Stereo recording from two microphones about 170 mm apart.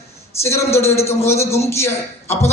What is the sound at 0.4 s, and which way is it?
A man's voice, 15° left (ahead or behind).